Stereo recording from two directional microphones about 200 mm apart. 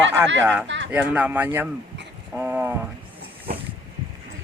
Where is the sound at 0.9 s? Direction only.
5° right (ahead or behind).